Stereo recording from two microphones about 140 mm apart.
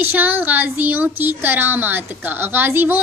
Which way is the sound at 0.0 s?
15° right (ahead or behind).